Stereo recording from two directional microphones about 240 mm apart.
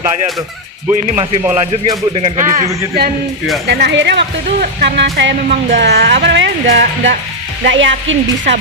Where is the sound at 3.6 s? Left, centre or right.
Right.